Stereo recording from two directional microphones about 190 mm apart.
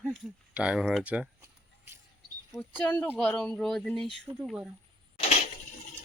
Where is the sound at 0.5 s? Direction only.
5° right (ahead or behind).